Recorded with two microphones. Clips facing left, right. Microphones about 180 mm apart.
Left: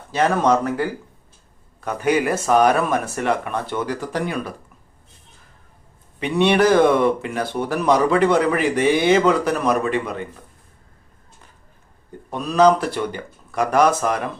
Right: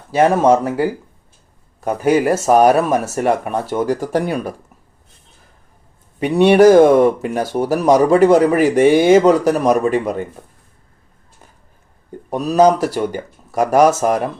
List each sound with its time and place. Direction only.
0.3 s speech: 25° right (ahead or behind)
2.0 s speech: 40° right (ahead or behind)
6.1 s speech: 45° right (ahead or behind)
12.3 s speech: 40° right (ahead or behind)